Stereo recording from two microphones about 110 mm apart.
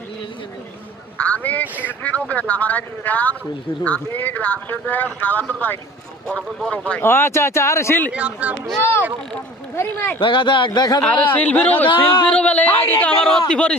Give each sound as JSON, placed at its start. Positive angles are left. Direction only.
{"t": 1.2, "sound": "a man's voice", "side_deg": 15}
{"t": 7.0, "sound": "speech", "side_deg": 20}
{"t": 8.1, "sound": "speech", "side_deg": -10}
{"t": 9.7, "sound": "speech", "side_deg": 20}
{"t": 10.2, "sound": "a man's voice", "side_deg": 50}
{"t": 11.0, "sound": "a man's voice", "side_deg": 15}
{"t": 11.9, "sound": "a man's voice", "side_deg": 50}
{"t": 12.3, "sound": "a man's voice", "side_deg": 10}